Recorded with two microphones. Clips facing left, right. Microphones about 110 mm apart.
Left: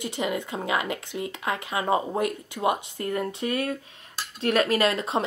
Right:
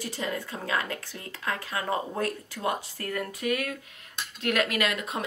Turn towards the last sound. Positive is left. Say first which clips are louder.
# left 5 dB
turn(degrees=30)  # may be behind; listen again after turning